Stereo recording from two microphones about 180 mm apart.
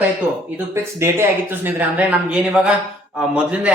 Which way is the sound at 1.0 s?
10° right (ahead or behind).